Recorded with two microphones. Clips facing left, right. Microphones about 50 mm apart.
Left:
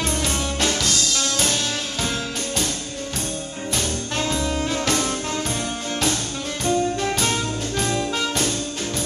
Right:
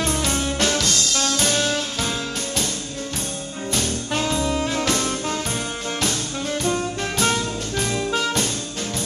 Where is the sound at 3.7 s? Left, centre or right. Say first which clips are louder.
Right 2 dB; centre.